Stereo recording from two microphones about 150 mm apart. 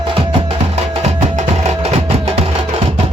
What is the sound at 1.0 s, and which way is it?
Music, 45° right (ahead or behind).